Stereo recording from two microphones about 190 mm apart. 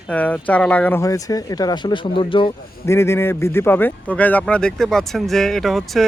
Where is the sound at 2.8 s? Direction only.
15° left (ahead or behind).